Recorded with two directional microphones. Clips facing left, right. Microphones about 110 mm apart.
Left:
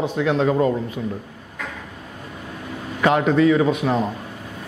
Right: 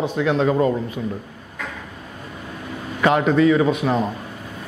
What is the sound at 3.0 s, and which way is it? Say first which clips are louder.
A man's voice: even; 20° right (ahead or behind).